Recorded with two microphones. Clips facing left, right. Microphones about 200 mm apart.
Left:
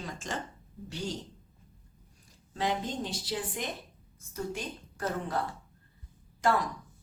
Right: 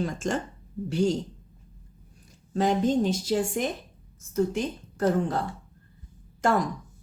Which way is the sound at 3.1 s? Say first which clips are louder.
Right 9 dB; 45° right (ahead or behind).